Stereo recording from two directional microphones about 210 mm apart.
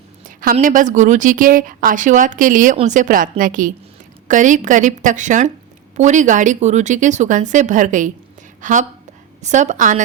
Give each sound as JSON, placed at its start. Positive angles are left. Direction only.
{"t": 0.3, "sound": "a woman's voice", "side_deg": -40}